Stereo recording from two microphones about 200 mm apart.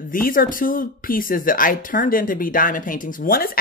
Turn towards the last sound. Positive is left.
turn(degrees=45)  # may be behind; listen again after turning